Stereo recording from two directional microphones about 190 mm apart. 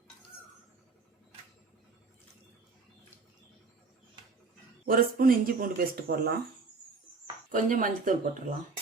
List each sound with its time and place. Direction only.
4.9 s speech: 50° right (ahead or behind)
7.5 s speech: 45° right (ahead or behind)